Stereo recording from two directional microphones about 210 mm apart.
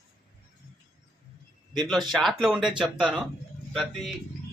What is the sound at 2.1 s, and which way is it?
A man's voice, centre (ahead or behind).